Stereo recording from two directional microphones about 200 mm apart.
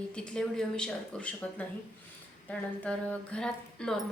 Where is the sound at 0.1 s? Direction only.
5° left (ahead or behind).